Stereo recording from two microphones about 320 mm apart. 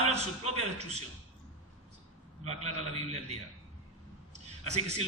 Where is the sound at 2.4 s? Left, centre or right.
Centre.